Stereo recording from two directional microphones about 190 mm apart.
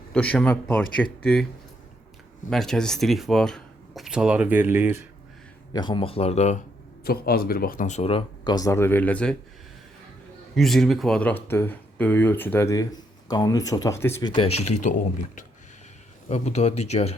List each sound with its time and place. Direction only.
0.1 s speech: 5° left (ahead or behind)
2.5 s speech: centre (ahead or behind)
5.7 s speech: 25° left (ahead or behind)
7.0 s speech: 50° left (ahead or behind); by 9.3 s 5° left (ahead or behind)
10.5 s speech: centre (ahead or behind)
14.3 s speech: 30° left (ahead or behind)